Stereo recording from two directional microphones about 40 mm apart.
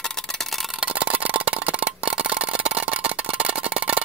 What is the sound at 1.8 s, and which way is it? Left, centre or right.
Tick-tock, right.